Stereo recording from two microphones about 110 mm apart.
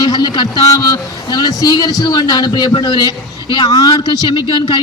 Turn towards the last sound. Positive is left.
turn(degrees=40)  # may be behind; listen again after turning